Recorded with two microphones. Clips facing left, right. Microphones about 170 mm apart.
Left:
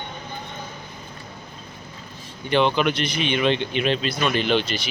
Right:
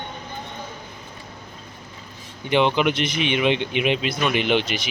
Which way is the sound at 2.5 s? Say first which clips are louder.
Right 1 dB; 15° right (ahead or behind).